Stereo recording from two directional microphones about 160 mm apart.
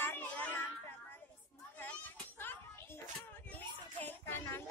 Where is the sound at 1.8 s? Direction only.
10° left (ahead or behind).